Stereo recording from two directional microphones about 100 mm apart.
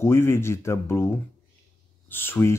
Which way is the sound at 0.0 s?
25° left (ahead or behind).